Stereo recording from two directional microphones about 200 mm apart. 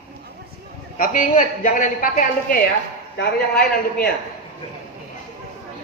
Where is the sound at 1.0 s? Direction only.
40° left (ahead or behind).